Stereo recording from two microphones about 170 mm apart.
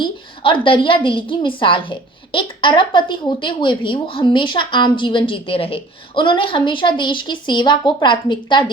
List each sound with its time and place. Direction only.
0.0 s a woman's voice: 30° left (ahead or behind)